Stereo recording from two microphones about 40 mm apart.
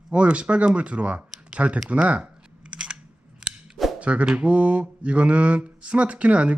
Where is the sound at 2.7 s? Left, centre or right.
Right.